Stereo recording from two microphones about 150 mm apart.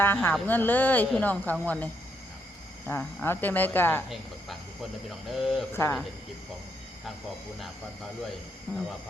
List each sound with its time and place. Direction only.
0.0 s speech: 15° left (ahead or behind)
5.3 s speech: centre (ahead or behind)
5.7 s speech: 15° left (ahead or behind)